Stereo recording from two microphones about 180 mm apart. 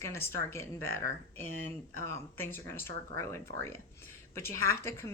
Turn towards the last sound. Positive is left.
turn(degrees=15)  # may be behind; listen again after turning